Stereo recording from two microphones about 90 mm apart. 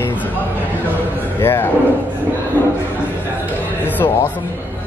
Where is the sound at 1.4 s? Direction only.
25° left (ahead or behind).